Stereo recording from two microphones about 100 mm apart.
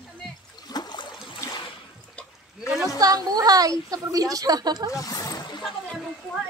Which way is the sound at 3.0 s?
40° right (ahead or behind).